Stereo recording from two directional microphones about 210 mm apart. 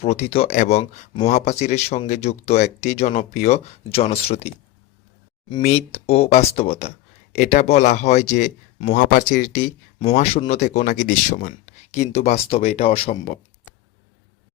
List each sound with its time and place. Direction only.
0.0 s speech: 30° left (ahead or behind)
5.6 s speech: 30° left (ahead or behind)